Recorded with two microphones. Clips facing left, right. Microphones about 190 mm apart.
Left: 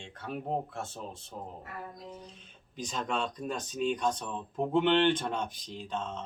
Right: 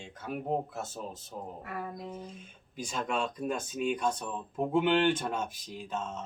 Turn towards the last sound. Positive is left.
turn(degrees=-5)  # may be behind; listen again after turning